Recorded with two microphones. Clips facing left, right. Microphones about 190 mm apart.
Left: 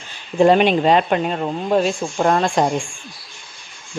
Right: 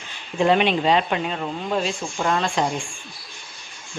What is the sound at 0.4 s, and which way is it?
Speech, 40° left (ahead or behind).